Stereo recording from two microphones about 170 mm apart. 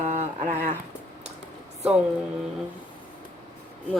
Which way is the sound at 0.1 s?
45° right (ahead or behind).